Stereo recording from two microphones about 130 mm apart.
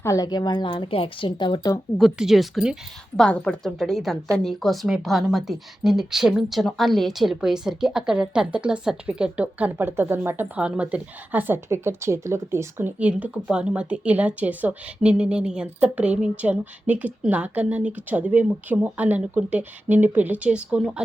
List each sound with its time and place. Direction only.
0.0 s a woman's voice: 25° left (ahead or behind)
2.0 s a woman's voice: centre (ahead or behind)